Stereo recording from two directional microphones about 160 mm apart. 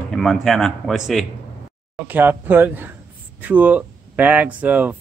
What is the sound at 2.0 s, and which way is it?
Speech, 10° right (ahead or behind).